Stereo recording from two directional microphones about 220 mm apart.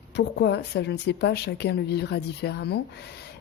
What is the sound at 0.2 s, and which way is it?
Speech, 50° left (ahead or behind).